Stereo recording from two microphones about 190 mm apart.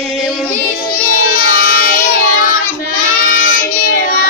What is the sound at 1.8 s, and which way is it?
Child singing, 50° left (ahead or behind).